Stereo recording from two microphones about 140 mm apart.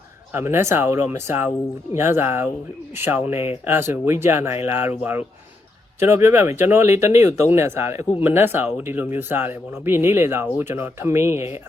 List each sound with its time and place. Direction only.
0.3 s speech: 15° right (ahead or behind)